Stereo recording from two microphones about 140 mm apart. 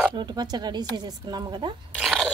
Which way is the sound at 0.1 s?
30° right (ahead or behind).